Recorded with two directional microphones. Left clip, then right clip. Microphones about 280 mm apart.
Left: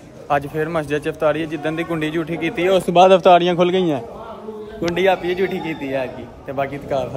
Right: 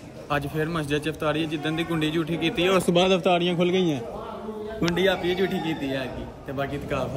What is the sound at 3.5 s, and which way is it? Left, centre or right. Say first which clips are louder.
Speech: left 6 dB; left.